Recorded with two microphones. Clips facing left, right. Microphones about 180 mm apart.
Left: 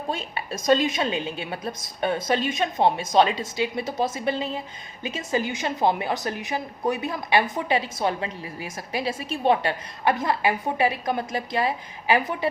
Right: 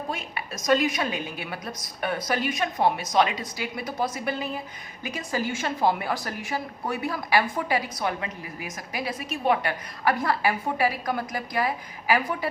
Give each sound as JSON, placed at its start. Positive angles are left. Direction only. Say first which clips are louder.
{"t": 0.1, "sound": "a woman's voice", "louder": "left 3 dB", "side_deg": 30}